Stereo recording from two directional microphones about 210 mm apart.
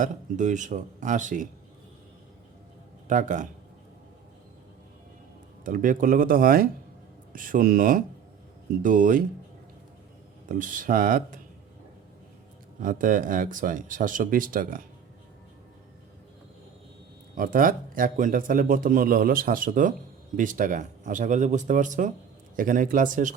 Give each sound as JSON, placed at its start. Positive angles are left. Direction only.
{"t": 0.0, "sound": "a man's voice", "side_deg": -35}
{"t": 3.1, "sound": "a man's voice", "side_deg": -35}
{"t": 5.6, "sound": "a man's voice", "side_deg": -40}
{"t": 10.5, "sound": "a man's voice", "side_deg": -40}
{"t": 12.8, "sound": "a man's voice", "side_deg": -40}
{"t": 17.3, "sound": "a man's voice", "side_deg": -40}